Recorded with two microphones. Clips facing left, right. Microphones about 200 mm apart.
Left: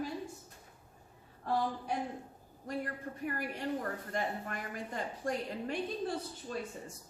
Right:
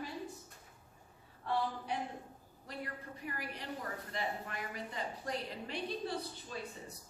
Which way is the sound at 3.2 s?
50° left (ahead or behind).